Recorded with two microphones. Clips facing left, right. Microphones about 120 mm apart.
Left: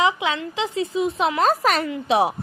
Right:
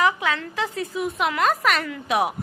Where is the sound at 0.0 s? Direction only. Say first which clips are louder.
Left 1 dB; 20° left (ahead or behind).